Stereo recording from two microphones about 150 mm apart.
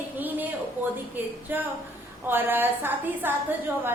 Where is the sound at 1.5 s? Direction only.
15° right (ahead or behind).